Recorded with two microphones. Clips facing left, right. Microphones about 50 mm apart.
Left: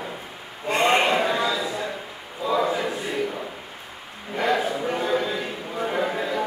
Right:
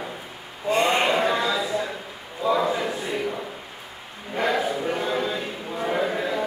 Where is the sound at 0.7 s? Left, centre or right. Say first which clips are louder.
Even; left.